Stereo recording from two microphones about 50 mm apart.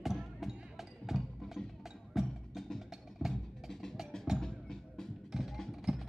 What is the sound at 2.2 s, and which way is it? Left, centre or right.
Wood block, centre.